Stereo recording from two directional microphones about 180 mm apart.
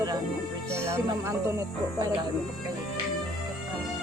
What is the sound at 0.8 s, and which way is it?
Speech, 15° right (ahead or behind).